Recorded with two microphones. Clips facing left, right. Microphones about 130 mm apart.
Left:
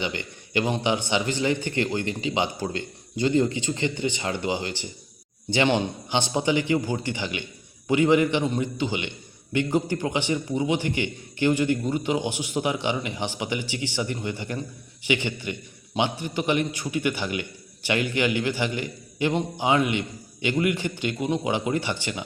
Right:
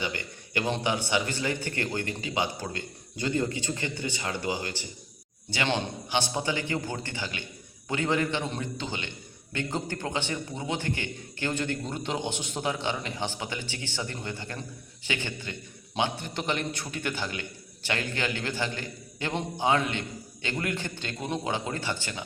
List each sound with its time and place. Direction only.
0.0 s a man's voice: 20° left (ahead or behind)